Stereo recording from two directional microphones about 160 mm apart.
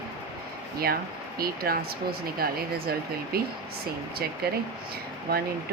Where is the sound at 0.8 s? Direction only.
70° right (ahead or behind).